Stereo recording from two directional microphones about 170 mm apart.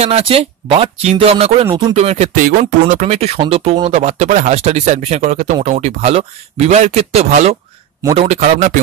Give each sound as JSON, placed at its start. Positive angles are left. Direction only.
{"t": 0.0, "sound": "a man's voice", "side_deg": -35}